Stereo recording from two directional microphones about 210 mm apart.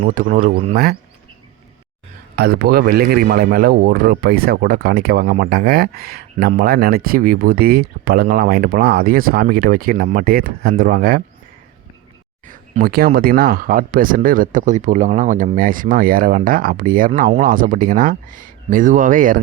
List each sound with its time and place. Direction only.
0.0 s speech: 40° right (ahead or behind)
2.3 s speech: 50° right (ahead or behind)
12.5 s speech: 40° right (ahead or behind)